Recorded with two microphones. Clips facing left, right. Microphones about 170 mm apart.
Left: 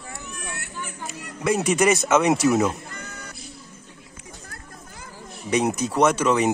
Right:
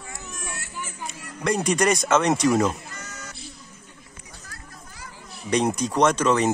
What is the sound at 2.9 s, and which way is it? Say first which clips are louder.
Music: left 2 dB; 55° left (ahead or behind).